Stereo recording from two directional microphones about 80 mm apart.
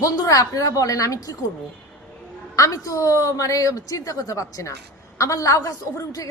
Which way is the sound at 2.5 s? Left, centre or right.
Left.